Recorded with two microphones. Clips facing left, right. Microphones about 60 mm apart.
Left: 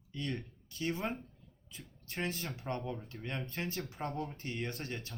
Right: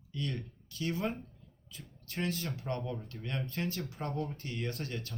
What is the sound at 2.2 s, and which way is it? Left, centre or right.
Speech, left.